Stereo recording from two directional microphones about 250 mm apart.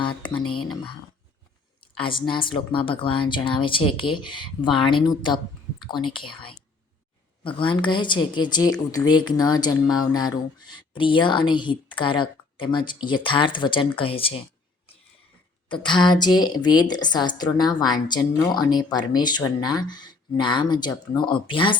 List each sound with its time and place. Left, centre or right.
0.0 s speech: centre
2.0 s speech: centre
15.7 s a woman's voice: centre